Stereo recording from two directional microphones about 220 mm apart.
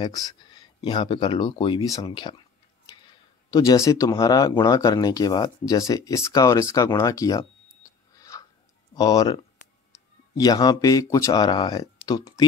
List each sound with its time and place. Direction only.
0.0 s speech: 20° left (ahead or behind)
3.4 s speech: 15° left (ahead or behind)